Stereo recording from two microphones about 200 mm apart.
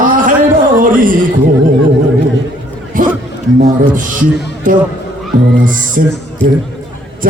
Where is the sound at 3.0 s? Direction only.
45° right (ahead or behind).